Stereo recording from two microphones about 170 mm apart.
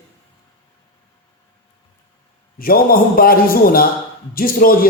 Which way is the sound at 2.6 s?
60° left (ahead or behind).